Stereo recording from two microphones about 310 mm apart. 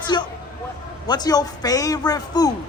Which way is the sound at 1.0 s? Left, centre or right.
Centre.